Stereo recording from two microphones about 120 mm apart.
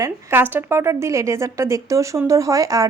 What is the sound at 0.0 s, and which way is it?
A woman's voice, 20° right (ahead or behind).